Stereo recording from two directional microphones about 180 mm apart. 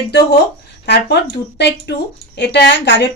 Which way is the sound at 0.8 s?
70° left (ahead or behind).